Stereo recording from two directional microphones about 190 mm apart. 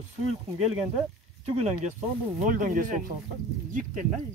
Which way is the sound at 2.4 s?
45° right (ahead or behind).